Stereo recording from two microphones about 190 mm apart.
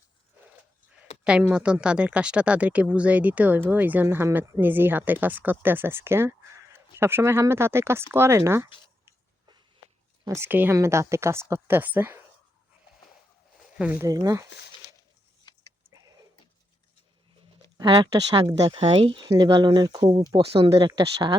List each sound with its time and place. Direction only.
1.2 s speech: 5° right (ahead or behind)
10.2 s speech: 15° right (ahead or behind)
13.6 s speech: 5° right (ahead or behind)
17.7 s speech: 20° right (ahead or behind)